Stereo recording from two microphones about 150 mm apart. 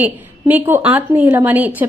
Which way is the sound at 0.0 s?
10° right (ahead or behind).